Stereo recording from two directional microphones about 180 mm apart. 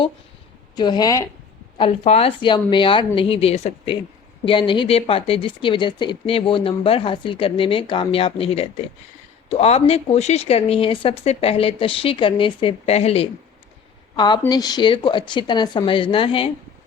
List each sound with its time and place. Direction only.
0.8 s speech: 25° left (ahead or behind)
1.8 s speech: 35° left (ahead or behind)
14.2 s speech: 25° left (ahead or behind)